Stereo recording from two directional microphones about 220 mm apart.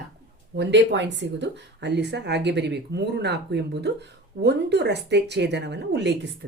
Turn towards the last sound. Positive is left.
turn(degrees=-50)  # may be behind; listen again after turning